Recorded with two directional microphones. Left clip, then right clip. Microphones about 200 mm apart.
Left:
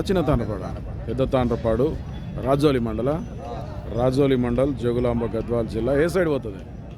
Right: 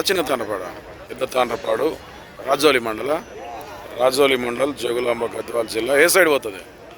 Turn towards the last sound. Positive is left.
turn(degrees=-5)  # may be behind; listen again after turning